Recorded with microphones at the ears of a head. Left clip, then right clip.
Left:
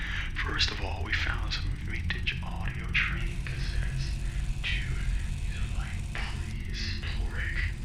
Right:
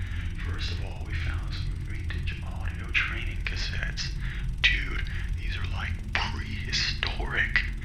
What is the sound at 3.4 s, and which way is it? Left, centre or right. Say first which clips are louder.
Music: right 7 dB; right.